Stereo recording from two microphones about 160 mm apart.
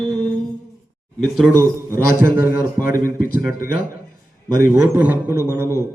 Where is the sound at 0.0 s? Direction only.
Centre (ahead or behind).